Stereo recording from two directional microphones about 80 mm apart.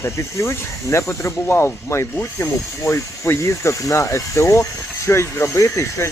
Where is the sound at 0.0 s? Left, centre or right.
Left.